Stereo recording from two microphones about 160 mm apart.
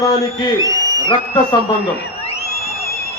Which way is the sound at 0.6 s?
20° right (ahead or behind).